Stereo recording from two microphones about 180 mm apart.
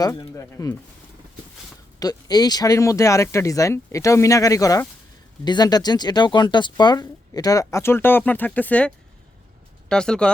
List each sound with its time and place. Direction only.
0.0 s speech: 20° left (ahead or behind)
2.0 s speech: 20° left (ahead or behind)
9.9 s speech: 5° left (ahead or behind)